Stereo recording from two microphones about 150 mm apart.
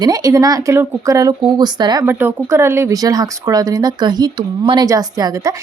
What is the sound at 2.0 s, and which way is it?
Speech, 15° right (ahead or behind).